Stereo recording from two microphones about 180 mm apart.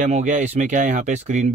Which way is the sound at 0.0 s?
40° right (ahead or behind).